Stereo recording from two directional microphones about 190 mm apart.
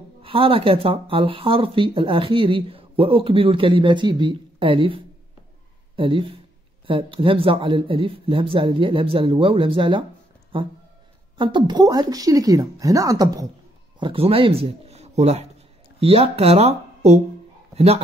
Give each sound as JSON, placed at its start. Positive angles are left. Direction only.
{"t": 0.2, "sound": "speech", "side_deg": -30}